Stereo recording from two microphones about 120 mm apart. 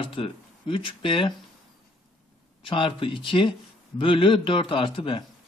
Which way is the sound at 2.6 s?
45° left (ahead or behind).